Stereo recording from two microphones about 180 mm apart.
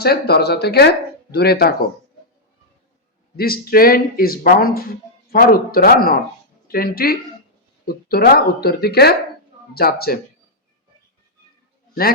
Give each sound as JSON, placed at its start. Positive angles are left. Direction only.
{"t": 0.0, "sound": "speech", "side_deg": 60}
{"t": 3.3, "sound": "speech", "side_deg": 55}